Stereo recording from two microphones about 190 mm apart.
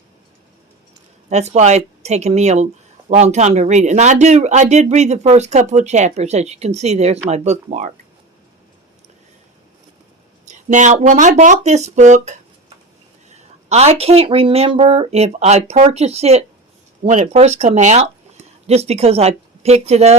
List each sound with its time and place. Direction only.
1.3 s speech: 35° right (ahead or behind)
10.4 s speech: 40° right (ahead or behind)
13.7 s speech: 35° right (ahead or behind)